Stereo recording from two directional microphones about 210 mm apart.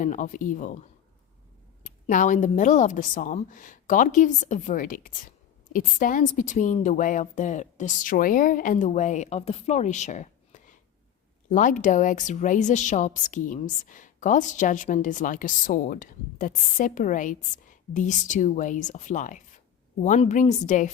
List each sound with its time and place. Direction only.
0.0 s a woman's voice: 35° left (ahead or behind)